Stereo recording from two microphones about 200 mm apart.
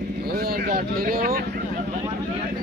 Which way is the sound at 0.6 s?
50° right (ahead or behind).